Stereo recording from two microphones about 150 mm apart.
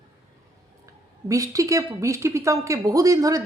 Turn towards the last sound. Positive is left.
turn(degrees=-25)  # may be behind; listen again after turning